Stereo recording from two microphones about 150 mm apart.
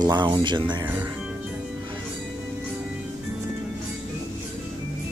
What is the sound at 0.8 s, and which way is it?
Speech, 15° right (ahead or behind).